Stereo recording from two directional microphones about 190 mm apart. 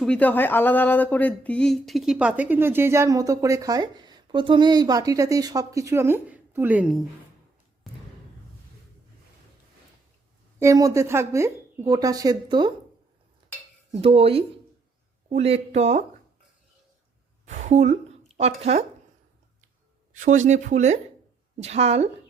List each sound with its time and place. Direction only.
0.0 s speech: 5° left (ahead or behind)
10.6 s speech: 15° right (ahead or behind)
13.9 s speech: 30° right (ahead or behind)
17.4 s a sound: 35° right (ahead or behind)
18.6 s speech: 35° right (ahead or behind)
20.1 s speech: 40° right (ahead or behind)